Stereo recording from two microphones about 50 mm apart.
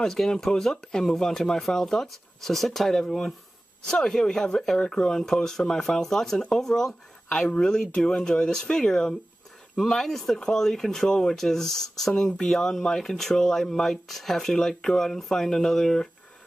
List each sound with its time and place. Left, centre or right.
0.0 s speech: centre
7.2 s speech: centre